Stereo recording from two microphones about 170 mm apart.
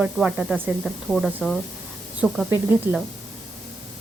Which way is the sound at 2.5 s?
10° right (ahead or behind).